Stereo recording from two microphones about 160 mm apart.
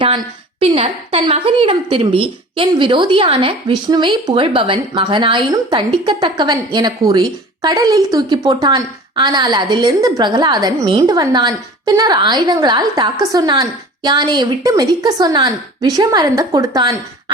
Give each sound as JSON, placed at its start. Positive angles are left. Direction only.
{"t": 0.6, "sound": "a woman's voice", "side_deg": -35}